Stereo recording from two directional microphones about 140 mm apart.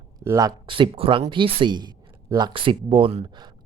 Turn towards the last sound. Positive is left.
turn(degrees=-40)  # may be behind; listen again after turning